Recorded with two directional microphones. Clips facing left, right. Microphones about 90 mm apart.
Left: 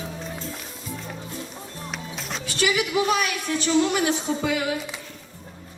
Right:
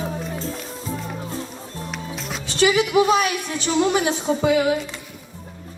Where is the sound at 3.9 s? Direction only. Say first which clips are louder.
Right 3 dB; 25° right (ahead or behind).